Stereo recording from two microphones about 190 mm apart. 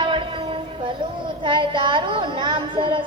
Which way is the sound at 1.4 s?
25° right (ahead or behind).